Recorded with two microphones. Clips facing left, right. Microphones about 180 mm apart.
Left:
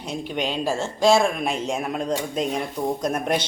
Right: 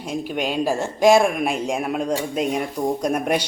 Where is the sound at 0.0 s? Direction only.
10° right (ahead or behind).